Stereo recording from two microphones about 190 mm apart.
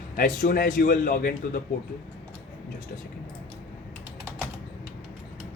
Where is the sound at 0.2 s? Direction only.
50° left (ahead or behind).